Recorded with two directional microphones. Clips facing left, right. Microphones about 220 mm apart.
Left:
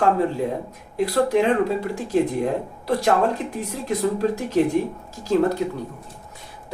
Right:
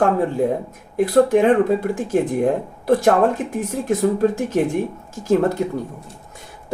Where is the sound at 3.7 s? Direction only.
50° right (ahead or behind).